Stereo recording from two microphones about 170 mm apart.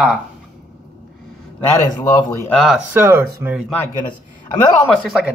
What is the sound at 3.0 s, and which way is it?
Speech, 15° right (ahead or behind).